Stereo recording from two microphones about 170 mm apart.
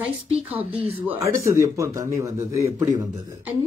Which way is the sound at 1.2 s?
15° right (ahead or behind).